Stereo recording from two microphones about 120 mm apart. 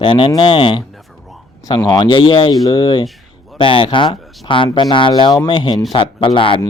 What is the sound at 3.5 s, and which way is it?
Speech, 45° left (ahead or behind).